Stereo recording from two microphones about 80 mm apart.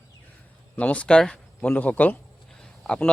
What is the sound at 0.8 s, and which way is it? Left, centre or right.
Speech, centre.